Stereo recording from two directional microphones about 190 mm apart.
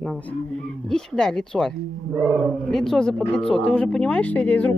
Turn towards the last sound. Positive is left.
turn(degrees=5)  # may be behind; listen again after turning